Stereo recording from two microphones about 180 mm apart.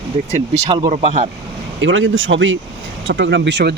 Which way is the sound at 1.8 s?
90° right.